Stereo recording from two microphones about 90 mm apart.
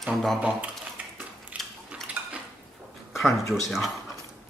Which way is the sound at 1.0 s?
15° right (ahead or behind).